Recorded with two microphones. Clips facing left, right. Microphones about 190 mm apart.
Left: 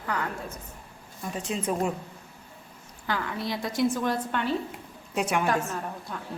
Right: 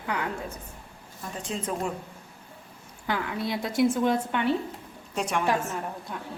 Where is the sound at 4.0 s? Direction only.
15° right (ahead or behind).